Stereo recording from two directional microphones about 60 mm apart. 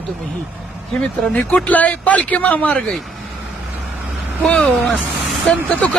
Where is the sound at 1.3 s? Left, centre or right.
Left.